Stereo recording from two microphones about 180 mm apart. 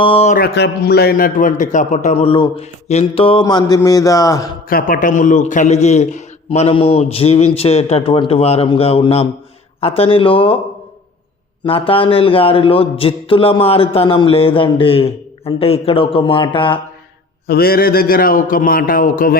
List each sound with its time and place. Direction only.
0.0 s a man's voice: 30° left (ahead or behind)
0.3 s a man's voice: 60° left (ahead or behind); by 4.4 s 20° left (ahead or behind)
4.7 s a man's voice: 50° left (ahead or behind); by 10.5 s 30° left (ahead or behind)
11.6 s a man's voice: 30° left (ahead or behind)
17.4 s a man's voice: 60° left (ahead or behind)